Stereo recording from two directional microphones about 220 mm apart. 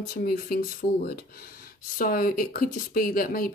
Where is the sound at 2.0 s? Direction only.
40° left (ahead or behind).